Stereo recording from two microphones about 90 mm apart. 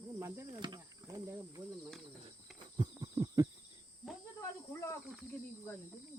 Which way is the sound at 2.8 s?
40° right (ahead or behind).